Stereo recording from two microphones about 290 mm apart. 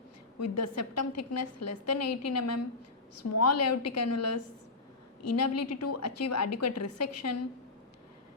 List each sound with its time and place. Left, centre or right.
0.3 s a woman's voice: left